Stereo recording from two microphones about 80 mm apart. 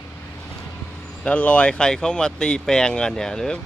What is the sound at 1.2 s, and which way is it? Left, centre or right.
Speech, centre.